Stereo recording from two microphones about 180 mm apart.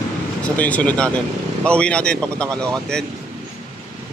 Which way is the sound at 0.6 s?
10° left (ahead or behind).